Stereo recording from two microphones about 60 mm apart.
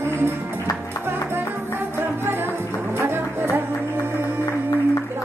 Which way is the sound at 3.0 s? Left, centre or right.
Right.